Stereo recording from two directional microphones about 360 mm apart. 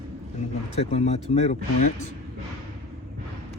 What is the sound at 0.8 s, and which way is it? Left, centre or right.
Speech, centre.